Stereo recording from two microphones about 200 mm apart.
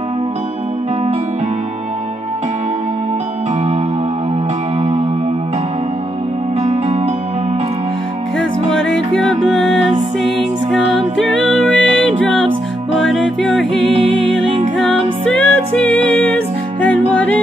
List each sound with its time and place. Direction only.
6.6 s music: 30° right (ahead or behind)
9.1 s music: centre (ahead or behind)